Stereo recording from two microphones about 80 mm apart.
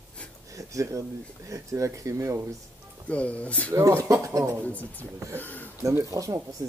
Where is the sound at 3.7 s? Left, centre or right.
Right.